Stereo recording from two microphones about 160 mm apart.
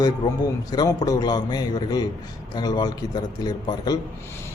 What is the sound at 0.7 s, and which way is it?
A man's voice, 25° left (ahead or behind).